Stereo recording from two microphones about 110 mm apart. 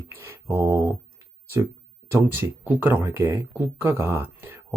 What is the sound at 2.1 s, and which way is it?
Speech, 20° right (ahead or behind).